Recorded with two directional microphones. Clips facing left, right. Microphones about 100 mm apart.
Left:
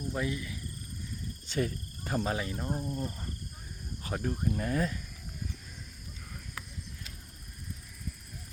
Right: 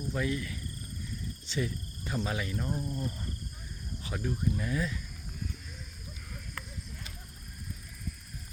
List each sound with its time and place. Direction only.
0.1 s speech: 25° left (ahead or behind)
1.5 s speech: 45° left (ahead or behind)
2.8 s speech: 25° left (ahead or behind)
4.0 s speech: 40° left (ahead or behind)